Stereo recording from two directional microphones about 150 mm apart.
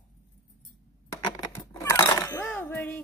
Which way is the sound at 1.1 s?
25° left (ahead or behind).